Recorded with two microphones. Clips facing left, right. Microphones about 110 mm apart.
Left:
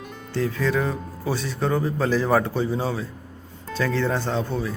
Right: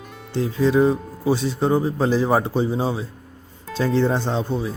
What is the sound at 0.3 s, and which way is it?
Speech, 25° right (ahead or behind).